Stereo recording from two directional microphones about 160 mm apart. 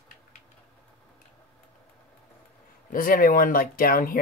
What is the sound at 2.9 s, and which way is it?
Speech, 60° left (ahead or behind).